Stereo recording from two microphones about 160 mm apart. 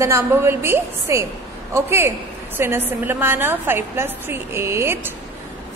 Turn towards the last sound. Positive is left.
turn(degrees=-15)  # may be behind; listen again after turning